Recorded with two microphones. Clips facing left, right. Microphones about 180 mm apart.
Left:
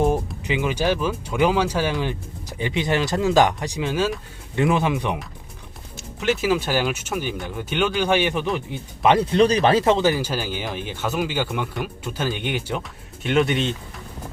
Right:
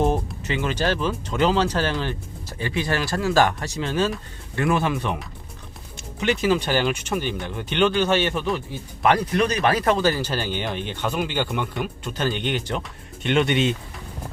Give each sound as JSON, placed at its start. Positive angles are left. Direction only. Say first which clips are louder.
{"t": 0.4, "sound": "speech", "louder": "left 2 dB", "side_deg": 10}
{"t": 6.1, "sound": "speech", "louder": "even", "side_deg": 5}
{"t": 9.0, "sound": "speech", "louder": "left 4 dB", "side_deg": 25}